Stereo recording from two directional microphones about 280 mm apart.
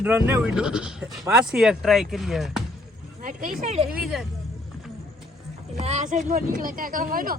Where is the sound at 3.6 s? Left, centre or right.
Right.